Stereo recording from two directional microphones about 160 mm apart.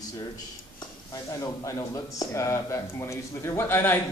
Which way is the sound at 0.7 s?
20° left (ahead or behind).